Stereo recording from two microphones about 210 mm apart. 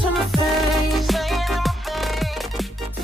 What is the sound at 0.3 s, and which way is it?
Music, centre (ahead or behind).